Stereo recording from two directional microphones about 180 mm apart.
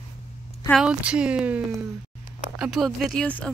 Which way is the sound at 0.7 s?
5° right (ahead or behind).